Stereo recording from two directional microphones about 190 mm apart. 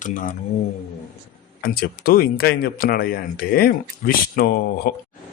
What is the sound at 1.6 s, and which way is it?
Speech, 50° left (ahead or behind).